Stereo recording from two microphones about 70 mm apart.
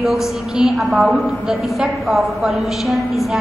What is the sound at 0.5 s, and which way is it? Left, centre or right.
A woman's voice, centre.